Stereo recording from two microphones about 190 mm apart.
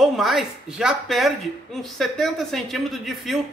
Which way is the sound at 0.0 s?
Centre (ahead or behind).